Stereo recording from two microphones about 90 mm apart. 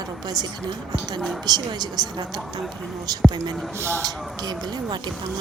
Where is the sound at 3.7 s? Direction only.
30° right (ahead or behind).